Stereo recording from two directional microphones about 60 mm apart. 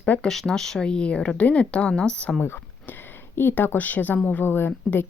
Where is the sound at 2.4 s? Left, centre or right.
Left.